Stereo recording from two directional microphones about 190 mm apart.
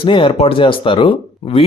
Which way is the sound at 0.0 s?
30° left (ahead or behind).